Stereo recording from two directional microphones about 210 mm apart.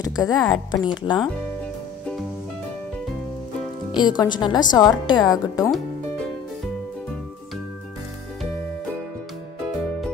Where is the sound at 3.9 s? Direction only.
20° left (ahead or behind).